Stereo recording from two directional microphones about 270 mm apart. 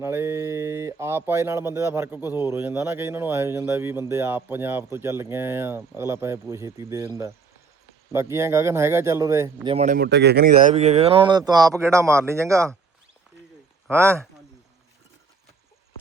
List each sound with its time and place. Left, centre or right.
0.0 s speech: centre
9.7 s speech: right; by 12.7 s centre
13.9 s speech: centre